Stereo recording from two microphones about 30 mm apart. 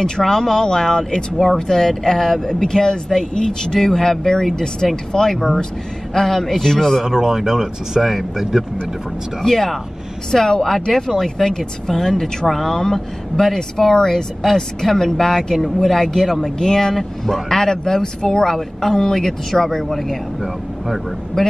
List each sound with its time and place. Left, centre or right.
0.2 s speech: centre
7.1 s speech: centre
8.0 s speech: centre
9.4 s speech: centre
18.5 s speech: centre
21.4 s speech: centre